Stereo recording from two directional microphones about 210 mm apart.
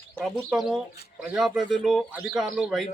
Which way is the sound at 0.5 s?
Centre (ahead or behind).